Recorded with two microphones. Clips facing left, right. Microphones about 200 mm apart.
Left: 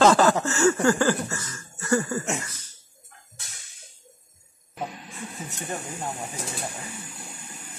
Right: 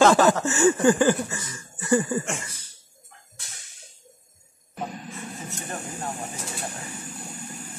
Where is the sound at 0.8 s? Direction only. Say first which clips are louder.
Right 2 dB; 15° right (ahead or behind).